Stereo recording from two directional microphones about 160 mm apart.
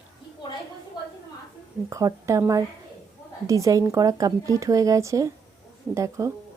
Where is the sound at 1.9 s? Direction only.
20° right (ahead or behind).